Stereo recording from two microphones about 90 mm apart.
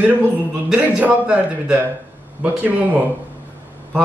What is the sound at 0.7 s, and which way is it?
A man's voice, 15° right (ahead or behind).